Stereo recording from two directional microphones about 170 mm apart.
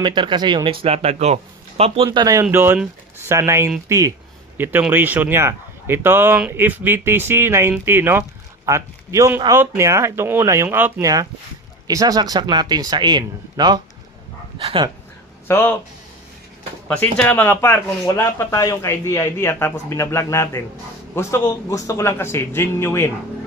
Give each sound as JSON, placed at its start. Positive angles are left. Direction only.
{"t": 0.0, "sound": "speech", "side_deg": -25}
{"t": 2.0, "sound": "speech", "side_deg": -20}
{"t": 15.4, "sound": "speech", "side_deg": 15}
{"t": 16.8, "sound": "speech", "side_deg": 5}